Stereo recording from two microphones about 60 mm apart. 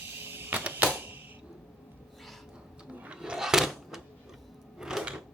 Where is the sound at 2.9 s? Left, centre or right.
Right.